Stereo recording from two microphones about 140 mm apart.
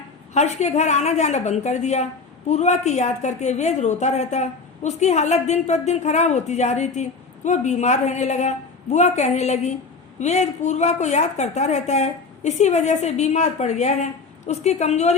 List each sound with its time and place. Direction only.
0.3 s a woman's voice: 55° left (ahead or behind)